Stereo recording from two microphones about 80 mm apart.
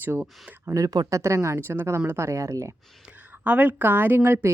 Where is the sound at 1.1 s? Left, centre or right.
Right.